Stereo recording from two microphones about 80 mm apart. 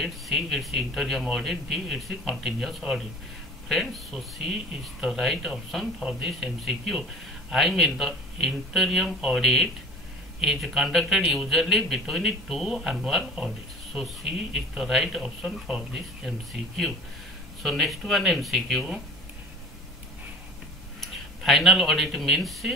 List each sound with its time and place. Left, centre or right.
0.0 s a man's voice: centre
21.0 s speech: centre